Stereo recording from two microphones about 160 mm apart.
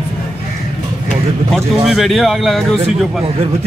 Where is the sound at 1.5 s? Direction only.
Centre (ahead or behind).